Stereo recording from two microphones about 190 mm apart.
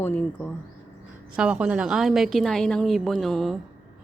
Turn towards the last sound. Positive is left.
turn(degrees=0)  # may be behind; listen again after turning